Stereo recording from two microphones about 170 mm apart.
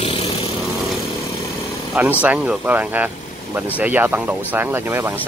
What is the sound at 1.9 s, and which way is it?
Speech, 10° right (ahead or behind).